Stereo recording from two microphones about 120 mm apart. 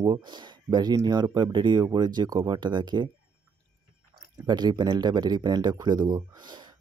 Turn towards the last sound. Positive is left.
turn(degrees=-35)  # may be behind; listen again after turning